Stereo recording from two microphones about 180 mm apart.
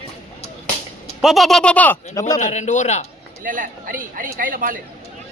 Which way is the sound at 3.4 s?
50° right (ahead or behind).